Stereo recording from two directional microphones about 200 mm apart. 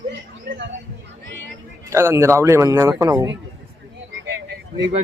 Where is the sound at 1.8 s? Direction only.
15° right (ahead or behind).